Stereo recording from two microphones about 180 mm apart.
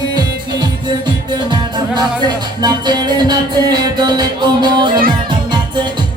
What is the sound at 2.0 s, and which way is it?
Music, 25° right (ahead or behind).